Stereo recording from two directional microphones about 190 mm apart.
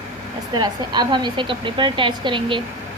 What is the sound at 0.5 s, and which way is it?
Speech, 20° right (ahead or behind).